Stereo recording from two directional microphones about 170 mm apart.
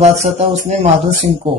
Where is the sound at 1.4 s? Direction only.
30° right (ahead or behind).